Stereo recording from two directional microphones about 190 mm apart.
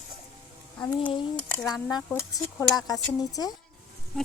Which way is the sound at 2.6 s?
20° left (ahead or behind).